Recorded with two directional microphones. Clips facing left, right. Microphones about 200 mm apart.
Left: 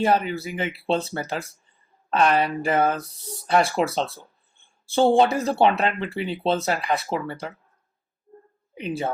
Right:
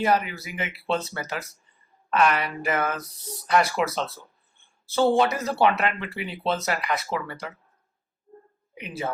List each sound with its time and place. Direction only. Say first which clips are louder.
0.0 s speech: left 2 dB; 30° left (ahead or behind)